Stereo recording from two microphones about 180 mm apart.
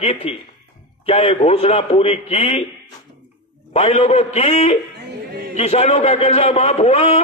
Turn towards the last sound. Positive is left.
turn(degrees=35)  # may be behind; listen again after turning